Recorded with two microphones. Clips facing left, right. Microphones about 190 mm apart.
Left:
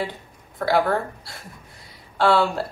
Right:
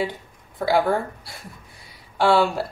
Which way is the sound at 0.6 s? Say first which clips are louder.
Even; 10° right (ahead or behind).